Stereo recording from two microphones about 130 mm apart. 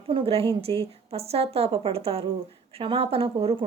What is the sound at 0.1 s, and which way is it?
A woman's voice, 45° right (ahead or behind).